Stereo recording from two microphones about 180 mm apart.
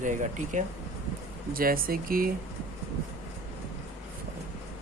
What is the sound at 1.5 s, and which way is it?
Speech, 55° right (ahead or behind).